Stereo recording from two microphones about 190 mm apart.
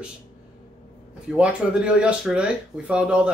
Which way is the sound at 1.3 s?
5° right (ahead or behind).